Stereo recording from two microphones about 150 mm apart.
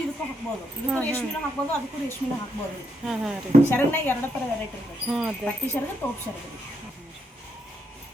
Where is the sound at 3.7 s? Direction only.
15° left (ahead or behind).